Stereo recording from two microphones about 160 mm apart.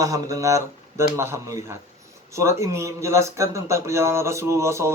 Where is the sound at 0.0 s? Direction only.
20° right (ahead or behind).